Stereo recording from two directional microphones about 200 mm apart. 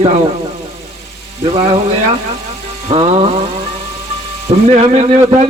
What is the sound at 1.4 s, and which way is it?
Speech, 30° right (ahead or behind).